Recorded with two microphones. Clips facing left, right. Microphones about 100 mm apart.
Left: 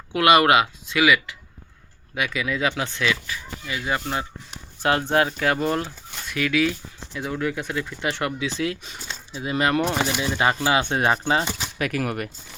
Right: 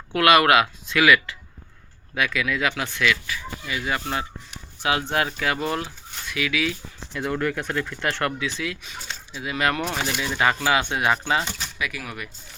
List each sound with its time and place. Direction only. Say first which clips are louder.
0.1 s speech: even; 25° left (ahead or behind)
4.8 s speech: left 3 dB; 40° left (ahead or behind)
7.3 s speech: right 1 dB; 5° left (ahead or behind)
8.4 s speech: left 3 dB; 30° left (ahead or behind)
9.8 s speech: left 3 dB; 20° left (ahead or behind)
11.8 s speech: left 7 dB; 50° left (ahead or behind)